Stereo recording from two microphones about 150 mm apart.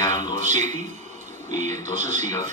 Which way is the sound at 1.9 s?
55° right (ahead or behind).